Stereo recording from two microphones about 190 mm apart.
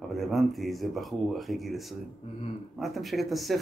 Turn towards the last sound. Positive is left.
turn(degrees=0)  # may be behind; listen again after turning